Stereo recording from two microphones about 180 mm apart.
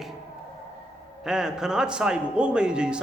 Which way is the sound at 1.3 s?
5° right (ahead or behind).